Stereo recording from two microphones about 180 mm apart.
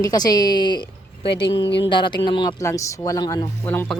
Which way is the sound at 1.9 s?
25° left (ahead or behind).